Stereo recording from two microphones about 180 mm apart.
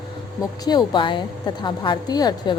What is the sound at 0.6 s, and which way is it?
A woman's voice, 25° left (ahead or behind).